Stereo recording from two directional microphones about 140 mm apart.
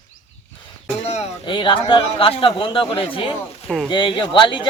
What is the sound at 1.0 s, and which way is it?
Speech, 50° left (ahead or behind).